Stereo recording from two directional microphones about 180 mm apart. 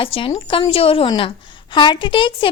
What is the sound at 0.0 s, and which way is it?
A woman's voice, 30° left (ahead or behind).